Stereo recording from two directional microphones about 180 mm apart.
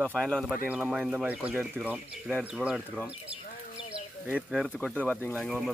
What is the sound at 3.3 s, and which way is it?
Speech, 35° right (ahead or behind).